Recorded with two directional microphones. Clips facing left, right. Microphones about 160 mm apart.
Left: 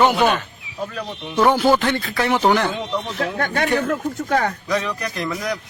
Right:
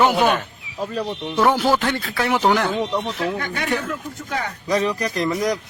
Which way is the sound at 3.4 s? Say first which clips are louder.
Left 4 dB; 55° left (ahead or behind).